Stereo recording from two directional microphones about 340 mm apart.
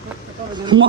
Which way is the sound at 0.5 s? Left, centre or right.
Centre.